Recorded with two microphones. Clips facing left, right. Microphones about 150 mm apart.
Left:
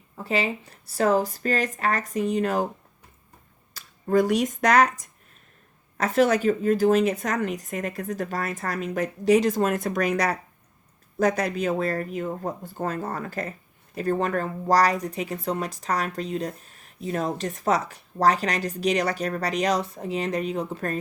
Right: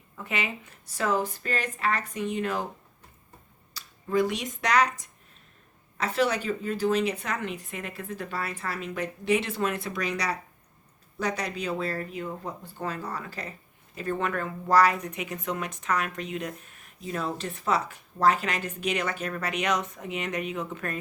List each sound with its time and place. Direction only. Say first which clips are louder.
0.2 s speech: left 6 dB; 30° left (ahead or behind)
3.8 s a woman's voice: left 4 dB; 45° left (ahead or behind)